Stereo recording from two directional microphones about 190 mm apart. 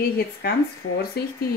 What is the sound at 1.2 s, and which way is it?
Speech, 55° left (ahead or behind).